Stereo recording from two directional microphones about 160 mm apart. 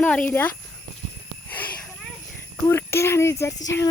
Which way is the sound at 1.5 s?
10° left (ahead or behind).